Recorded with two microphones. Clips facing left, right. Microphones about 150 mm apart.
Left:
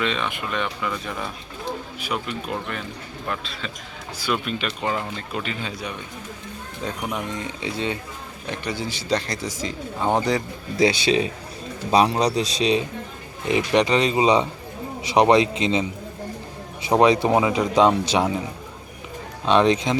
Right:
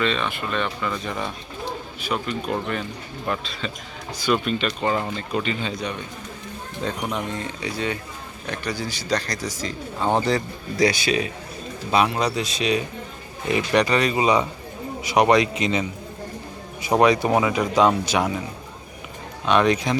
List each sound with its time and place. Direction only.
0.0 s speech: 15° left (ahead or behind)
10.0 s speech: 10° left (ahead or behind); by 12.8 s 30° left (ahead or behind)
13.5 s speech: 20° left (ahead or behind)
17.0 s speech: 25° left (ahead or behind)
19.5 s speech: 25° left (ahead or behind)